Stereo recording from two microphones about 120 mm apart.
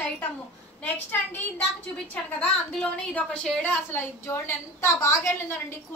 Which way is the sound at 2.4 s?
10° left (ahead or behind).